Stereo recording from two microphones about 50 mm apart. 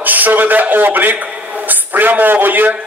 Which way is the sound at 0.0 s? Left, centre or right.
Right.